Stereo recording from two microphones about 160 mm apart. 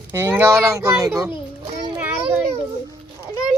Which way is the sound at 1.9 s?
10° right (ahead or behind).